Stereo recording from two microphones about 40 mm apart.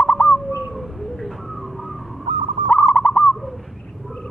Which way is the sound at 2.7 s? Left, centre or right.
Left.